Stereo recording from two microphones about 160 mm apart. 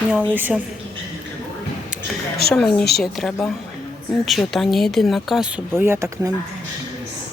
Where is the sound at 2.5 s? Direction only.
5° left (ahead or behind).